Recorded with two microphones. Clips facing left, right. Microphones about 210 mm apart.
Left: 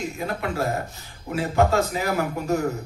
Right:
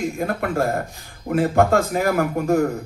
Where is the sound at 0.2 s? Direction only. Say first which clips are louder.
Right 3 dB; 50° right (ahead or behind).